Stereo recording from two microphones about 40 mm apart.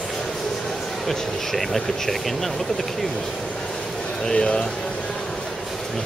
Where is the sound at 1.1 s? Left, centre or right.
Centre.